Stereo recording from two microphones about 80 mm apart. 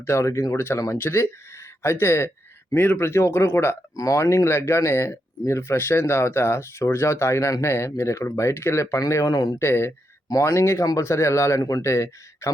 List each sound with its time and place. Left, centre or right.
0.0 s speech: left
3.9 s speech: left
9.6 s speech: left